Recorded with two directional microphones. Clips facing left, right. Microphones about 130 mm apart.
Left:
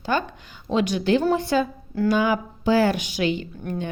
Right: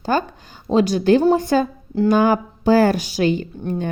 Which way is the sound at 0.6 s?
35° right (ahead or behind).